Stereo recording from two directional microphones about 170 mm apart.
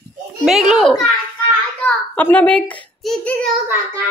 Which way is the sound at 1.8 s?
10° left (ahead or behind).